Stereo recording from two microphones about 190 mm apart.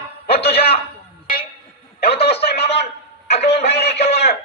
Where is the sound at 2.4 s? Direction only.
60° left (ahead or behind).